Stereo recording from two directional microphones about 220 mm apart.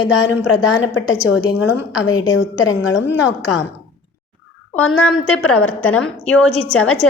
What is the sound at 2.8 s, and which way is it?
Speech, 5° right (ahead or behind).